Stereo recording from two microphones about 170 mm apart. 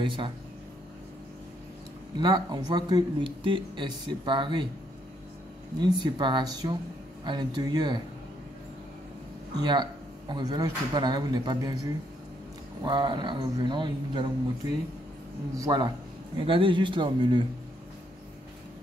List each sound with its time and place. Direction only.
0.0 s speech: 30° right (ahead or behind)
2.1 s speech: 25° right (ahead or behind)
5.8 s speech: 25° right (ahead or behind)
9.6 s speech: 25° right (ahead or behind)
15.5 s speech: 20° right (ahead or behind)